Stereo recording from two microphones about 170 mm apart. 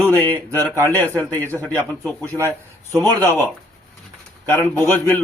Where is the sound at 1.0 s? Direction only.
15° right (ahead or behind).